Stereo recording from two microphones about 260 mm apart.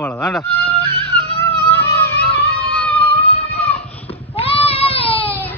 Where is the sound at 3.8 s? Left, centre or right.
Centre.